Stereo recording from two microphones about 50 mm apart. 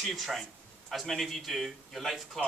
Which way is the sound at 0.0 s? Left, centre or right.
Centre.